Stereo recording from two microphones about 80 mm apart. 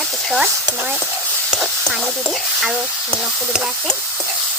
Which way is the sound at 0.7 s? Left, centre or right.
Right.